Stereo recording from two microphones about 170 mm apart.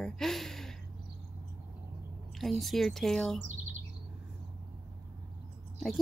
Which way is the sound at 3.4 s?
45° right (ahead or behind).